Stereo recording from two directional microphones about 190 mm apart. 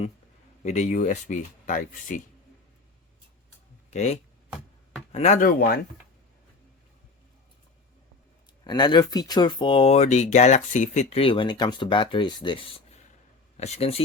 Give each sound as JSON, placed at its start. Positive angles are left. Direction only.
{"t": 0.6, "sound": "speech", "side_deg": 40}
{"t": 3.9, "sound": "speech", "side_deg": 35}
{"t": 5.5, "sound": "speech", "side_deg": 55}
{"t": 8.6, "sound": "speech", "side_deg": 25}